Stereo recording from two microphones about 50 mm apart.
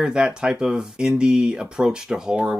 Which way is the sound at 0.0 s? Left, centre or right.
Centre.